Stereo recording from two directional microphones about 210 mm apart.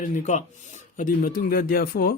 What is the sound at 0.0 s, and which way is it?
Speech, 35° left (ahead or behind).